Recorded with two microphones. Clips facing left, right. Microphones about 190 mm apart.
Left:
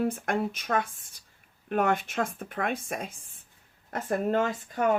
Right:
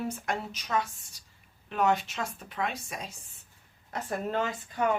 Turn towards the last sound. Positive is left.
turn(degrees=50)  # may be behind; listen again after turning